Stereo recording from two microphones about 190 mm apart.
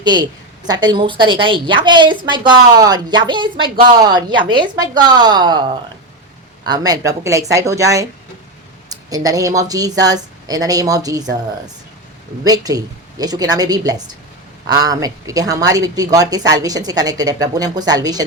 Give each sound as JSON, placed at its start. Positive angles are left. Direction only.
{"t": 0.0, "sound": "a woman's voice", "side_deg": -20}
{"t": 8.9, "sound": "a sound", "side_deg": -20}
{"t": 9.6, "sound": "a woman's voice", "side_deg": -20}